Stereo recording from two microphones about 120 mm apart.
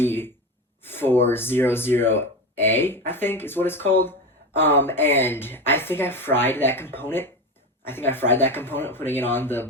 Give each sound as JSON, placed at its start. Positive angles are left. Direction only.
{"t": 0.0, "sound": "speech", "side_deg": 20}